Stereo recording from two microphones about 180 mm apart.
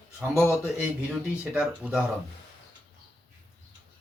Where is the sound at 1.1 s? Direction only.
5° right (ahead or behind).